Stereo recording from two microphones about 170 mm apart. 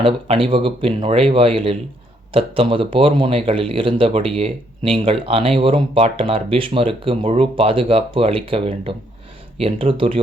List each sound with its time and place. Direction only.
0.0 s speech: 30° right (ahead or behind)